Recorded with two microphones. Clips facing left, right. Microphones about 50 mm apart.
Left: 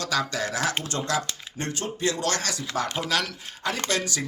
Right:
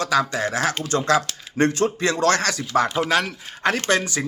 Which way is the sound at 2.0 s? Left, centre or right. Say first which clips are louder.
Right 4 dB; right.